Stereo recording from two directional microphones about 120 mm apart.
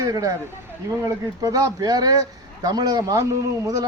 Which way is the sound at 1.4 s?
30° right (ahead or behind).